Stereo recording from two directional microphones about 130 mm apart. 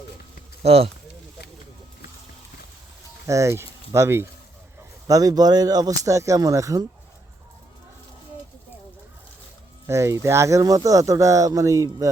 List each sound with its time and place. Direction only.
0.6 s speech: 50° right (ahead or behind)
3.2 s speech: 25° right (ahead or behind)
9.8 s speech: 20° right (ahead or behind)